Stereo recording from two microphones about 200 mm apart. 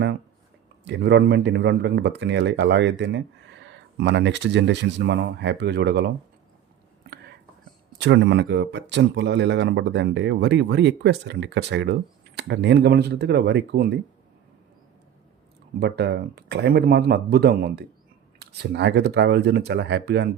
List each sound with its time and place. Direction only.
0.9 s speech: 60° right (ahead or behind)
7.9 s speech: 60° right (ahead or behind)
15.8 s speech: 55° right (ahead or behind)